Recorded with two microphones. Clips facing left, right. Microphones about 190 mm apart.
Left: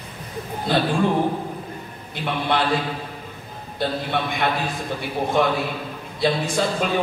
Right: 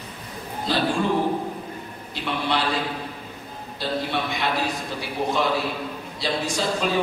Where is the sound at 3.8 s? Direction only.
55° left (ahead or behind).